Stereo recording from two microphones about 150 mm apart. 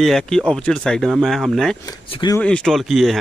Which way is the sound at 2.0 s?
35° left (ahead or behind).